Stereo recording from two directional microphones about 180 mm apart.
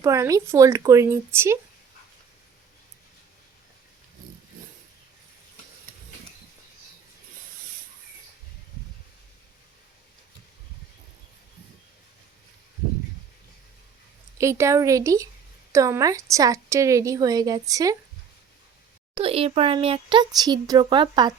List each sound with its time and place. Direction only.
0.0 s speech: 20° right (ahead or behind)
14.3 s speech: 15° right (ahead or behind)
19.1 s speech: 30° right (ahead or behind)